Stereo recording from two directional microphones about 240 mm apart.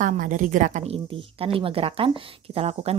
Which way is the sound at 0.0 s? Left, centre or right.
Right.